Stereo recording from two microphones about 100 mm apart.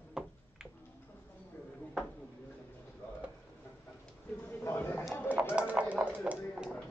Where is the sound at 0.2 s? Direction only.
5° right (ahead or behind).